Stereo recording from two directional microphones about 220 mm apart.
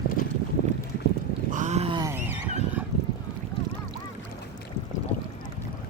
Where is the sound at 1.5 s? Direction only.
35° right (ahead or behind).